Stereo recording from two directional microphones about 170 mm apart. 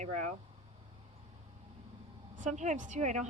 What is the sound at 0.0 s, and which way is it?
Speech, 45° right (ahead or behind).